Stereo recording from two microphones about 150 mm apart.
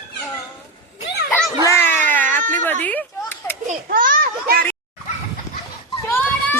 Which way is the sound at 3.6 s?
70° right (ahead or behind).